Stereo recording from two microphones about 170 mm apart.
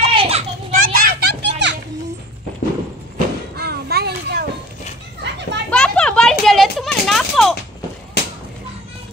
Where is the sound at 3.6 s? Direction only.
70° right (ahead or behind).